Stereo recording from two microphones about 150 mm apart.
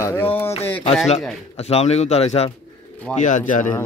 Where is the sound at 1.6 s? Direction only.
45° left (ahead or behind).